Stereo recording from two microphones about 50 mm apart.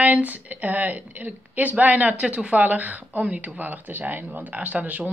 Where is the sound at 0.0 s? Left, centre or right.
Right.